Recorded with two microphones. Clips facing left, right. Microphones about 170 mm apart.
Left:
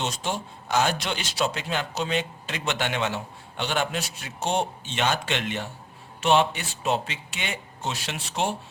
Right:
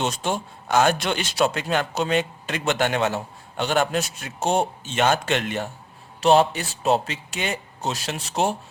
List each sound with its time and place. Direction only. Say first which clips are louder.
0.0 s speech: right 4 dB; 50° right (ahead or behind)